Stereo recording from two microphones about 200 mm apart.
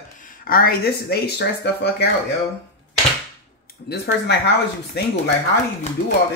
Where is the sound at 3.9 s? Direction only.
50° left (ahead or behind).